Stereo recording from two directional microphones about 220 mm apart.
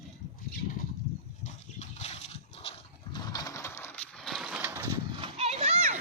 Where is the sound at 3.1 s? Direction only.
15° left (ahead or behind); by 4.8 s 5° right (ahead or behind).